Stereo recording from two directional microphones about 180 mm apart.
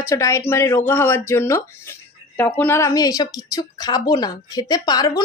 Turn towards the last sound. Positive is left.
turn(degrees=20)  # may be behind; listen again after turning